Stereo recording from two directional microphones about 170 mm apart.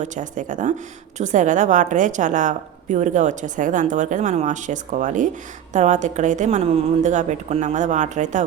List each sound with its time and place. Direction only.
0.0 s a woman's voice: 45° right (ahead or behind)